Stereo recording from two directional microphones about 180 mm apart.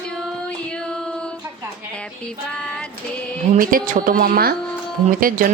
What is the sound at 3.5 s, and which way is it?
A woman's voice, 50° right (ahead or behind).